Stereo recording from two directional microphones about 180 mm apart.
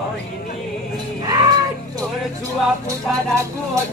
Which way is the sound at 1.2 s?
20° right (ahead or behind).